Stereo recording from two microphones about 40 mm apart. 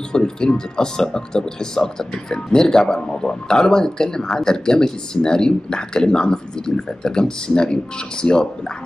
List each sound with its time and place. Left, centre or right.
0.1 s speech: centre